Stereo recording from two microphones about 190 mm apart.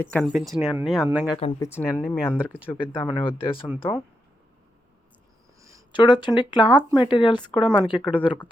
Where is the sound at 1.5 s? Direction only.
15° left (ahead or behind).